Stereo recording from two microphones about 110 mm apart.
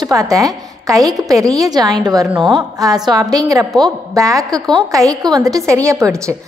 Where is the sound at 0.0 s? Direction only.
30° right (ahead or behind).